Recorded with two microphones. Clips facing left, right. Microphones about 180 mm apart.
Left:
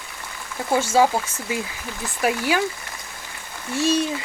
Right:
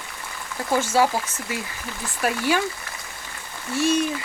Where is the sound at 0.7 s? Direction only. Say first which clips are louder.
Left 2 dB; 20° left (ahead or behind).